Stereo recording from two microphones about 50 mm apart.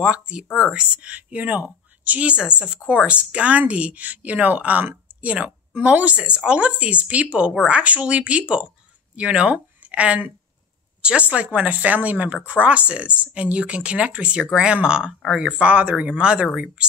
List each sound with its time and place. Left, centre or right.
0.0 s a woman's voice: right